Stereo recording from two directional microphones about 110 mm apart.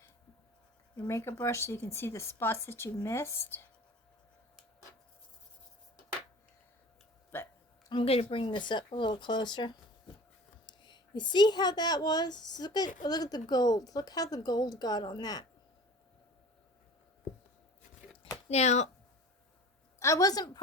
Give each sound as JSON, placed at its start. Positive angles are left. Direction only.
{"t": 1.0, "sound": "speech", "side_deg": 25}
{"t": 7.3, "sound": "music", "side_deg": 20}
{"t": 8.0, "sound": "speech", "side_deg": 65}
{"t": 18.4, "sound": "speech", "side_deg": 85}
{"t": 20.0, "sound": "speech", "side_deg": 30}